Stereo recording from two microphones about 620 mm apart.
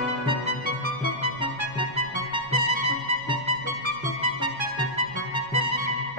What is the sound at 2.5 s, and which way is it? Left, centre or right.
Music, right.